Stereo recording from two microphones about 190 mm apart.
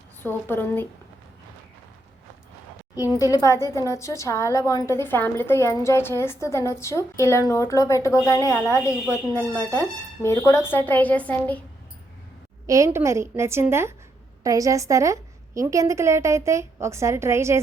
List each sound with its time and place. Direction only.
0.2 s a woman's voice: 10° left (ahead or behind)
3.2 s a woman's voice: 20° left (ahead or behind)
12.6 s a woman's voice: 15° right (ahead or behind)